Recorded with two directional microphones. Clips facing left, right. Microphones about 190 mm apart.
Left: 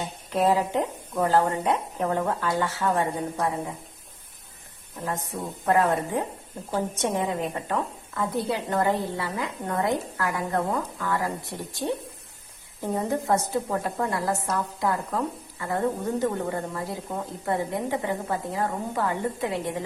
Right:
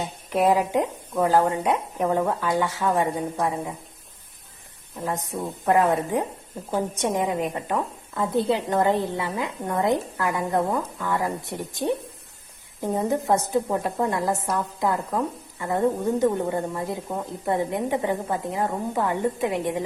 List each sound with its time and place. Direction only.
0.3 s a woman's voice: 15° right (ahead or behind)
5.0 s a woman's voice: 15° right (ahead or behind)